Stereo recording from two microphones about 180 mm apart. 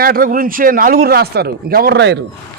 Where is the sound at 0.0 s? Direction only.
55° right (ahead or behind); by 2.1 s 70° right (ahead or behind).